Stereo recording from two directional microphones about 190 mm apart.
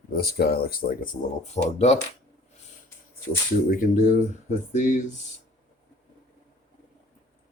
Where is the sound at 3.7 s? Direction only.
45° left (ahead or behind).